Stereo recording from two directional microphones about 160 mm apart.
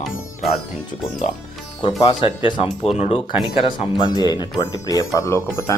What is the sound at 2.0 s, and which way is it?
Speech, 30° left (ahead or behind).